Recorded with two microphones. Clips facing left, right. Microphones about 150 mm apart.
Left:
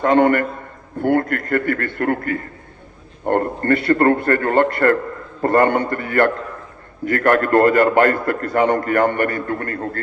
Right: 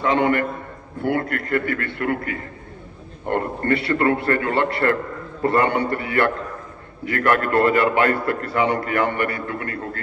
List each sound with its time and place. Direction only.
0.0 s a man's voice: 50° left (ahead or behind)